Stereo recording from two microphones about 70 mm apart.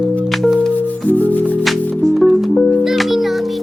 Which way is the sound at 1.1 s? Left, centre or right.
Left.